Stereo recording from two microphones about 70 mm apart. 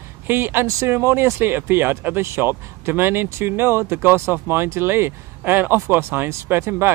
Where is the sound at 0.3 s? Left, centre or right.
Right.